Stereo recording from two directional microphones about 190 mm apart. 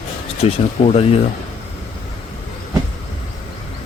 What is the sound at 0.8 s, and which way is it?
Speech, 30° left (ahead or behind).